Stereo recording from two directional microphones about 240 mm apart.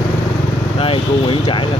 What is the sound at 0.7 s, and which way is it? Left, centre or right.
Speech, left.